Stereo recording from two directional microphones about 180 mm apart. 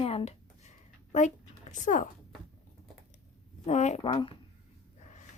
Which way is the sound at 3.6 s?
40° left (ahead or behind).